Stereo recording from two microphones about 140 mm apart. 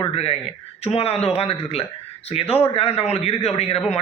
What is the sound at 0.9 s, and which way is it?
A man's voice, 45° left (ahead or behind).